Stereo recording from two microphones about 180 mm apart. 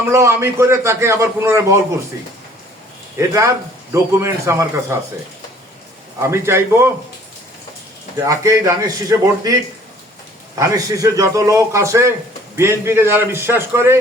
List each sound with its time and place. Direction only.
0.1 s a man's voice: 15° right (ahead or behind)
3.2 s a man's voice: 15° right (ahead or behind)
6.2 s a man's voice: 15° right (ahead or behind)
8.2 s a man's voice: 15° right (ahead or behind)